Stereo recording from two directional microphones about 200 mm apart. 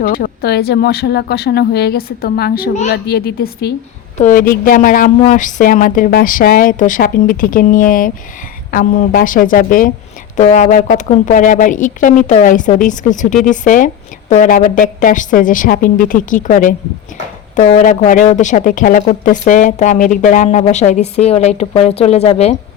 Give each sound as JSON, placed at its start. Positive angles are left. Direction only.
{"t": 0.0, "sound": "a woman's voice", "side_deg": 45}